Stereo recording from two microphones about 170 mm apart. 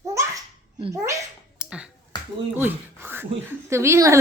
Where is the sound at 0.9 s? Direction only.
20° right (ahead or behind).